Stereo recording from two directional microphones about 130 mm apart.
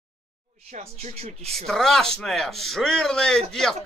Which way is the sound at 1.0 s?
50° right (ahead or behind).